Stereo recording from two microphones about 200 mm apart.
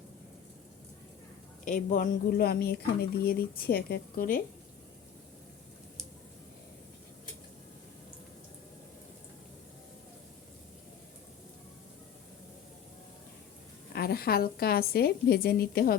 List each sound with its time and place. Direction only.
1.6 s speech: 40° left (ahead or behind)
13.9 s speech: 50° left (ahead or behind)